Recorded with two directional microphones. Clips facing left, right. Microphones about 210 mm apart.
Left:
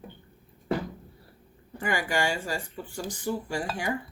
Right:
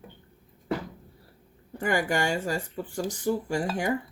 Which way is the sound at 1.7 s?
45° right (ahead or behind).